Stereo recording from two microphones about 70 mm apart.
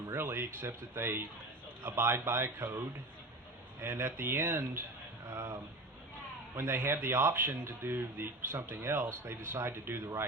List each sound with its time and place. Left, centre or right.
0.1 s speech: right
6.6 s speech: right